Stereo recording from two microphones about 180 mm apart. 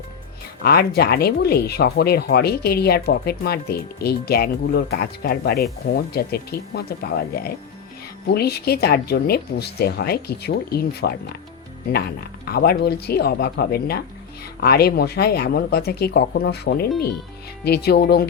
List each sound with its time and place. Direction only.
0.6 s speech: 60° left (ahead or behind)
12.5 s speech: 60° left (ahead or behind)